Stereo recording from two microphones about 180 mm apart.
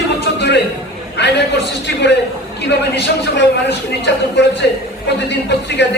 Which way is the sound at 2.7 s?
75° left (ahead or behind).